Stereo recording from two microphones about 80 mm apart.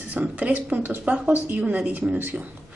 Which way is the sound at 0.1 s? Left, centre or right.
Centre.